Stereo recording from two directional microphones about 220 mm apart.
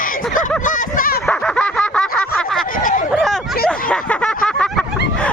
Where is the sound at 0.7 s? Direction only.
40° left (ahead or behind).